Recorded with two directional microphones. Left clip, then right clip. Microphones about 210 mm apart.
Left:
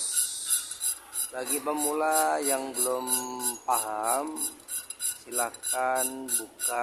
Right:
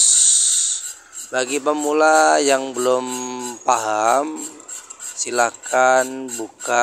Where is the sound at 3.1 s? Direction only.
20° right (ahead or behind).